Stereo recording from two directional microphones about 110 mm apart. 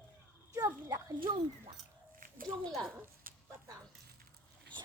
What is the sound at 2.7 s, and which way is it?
Speech, 5° left (ahead or behind).